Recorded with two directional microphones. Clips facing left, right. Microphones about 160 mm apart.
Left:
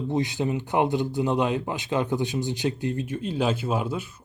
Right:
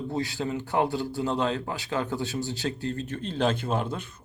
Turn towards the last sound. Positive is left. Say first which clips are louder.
# left 2 dB
turn(degrees=10)  # may be behind; listen again after turning